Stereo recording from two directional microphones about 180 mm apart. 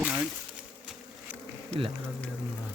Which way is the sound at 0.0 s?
5° right (ahead or behind).